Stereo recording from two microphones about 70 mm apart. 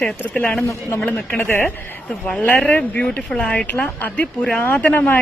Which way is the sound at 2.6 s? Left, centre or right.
Centre.